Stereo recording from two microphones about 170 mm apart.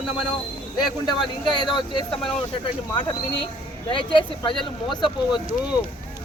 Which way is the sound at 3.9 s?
30° left (ahead or behind).